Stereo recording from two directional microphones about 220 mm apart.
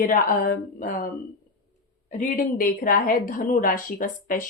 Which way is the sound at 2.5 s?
40° left (ahead or behind).